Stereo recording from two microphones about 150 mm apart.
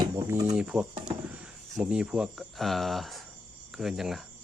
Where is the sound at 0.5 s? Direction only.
10° right (ahead or behind).